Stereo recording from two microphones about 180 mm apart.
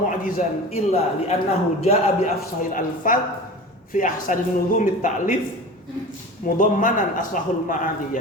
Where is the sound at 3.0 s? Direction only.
50° left (ahead or behind).